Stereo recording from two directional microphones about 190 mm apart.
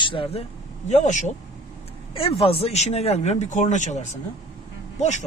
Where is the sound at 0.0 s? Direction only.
30° left (ahead or behind).